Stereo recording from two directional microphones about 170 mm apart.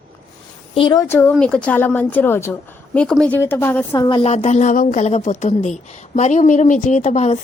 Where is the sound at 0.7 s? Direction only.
30° left (ahead or behind).